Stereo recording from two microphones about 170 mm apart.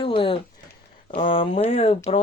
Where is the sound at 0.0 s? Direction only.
30° left (ahead or behind).